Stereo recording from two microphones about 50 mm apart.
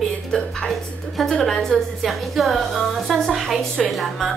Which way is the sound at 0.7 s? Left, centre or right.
Centre.